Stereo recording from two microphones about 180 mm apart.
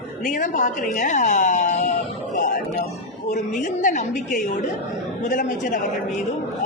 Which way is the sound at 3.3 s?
45° left (ahead or behind).